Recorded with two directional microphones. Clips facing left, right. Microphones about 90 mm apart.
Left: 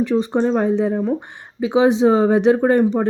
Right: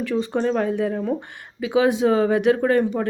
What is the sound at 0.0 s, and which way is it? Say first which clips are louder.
Speech: left 4 dB; 20° left (ahead or behind).